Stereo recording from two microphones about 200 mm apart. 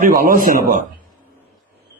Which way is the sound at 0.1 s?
45° right (ahead or behind).